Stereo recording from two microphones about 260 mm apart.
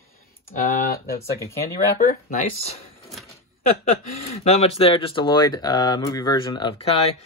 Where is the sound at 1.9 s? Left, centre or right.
Left.